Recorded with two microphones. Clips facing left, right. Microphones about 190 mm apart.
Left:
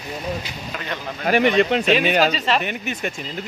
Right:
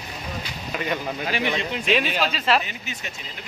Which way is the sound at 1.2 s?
60° left (ahead or behind).